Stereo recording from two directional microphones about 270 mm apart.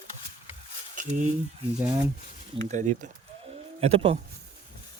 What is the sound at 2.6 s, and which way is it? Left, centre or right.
Speech, right.